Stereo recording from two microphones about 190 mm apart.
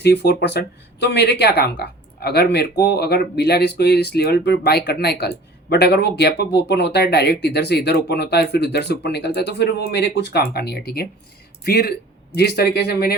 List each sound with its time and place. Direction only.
0.0 s speech: 60° left (ahead or behind)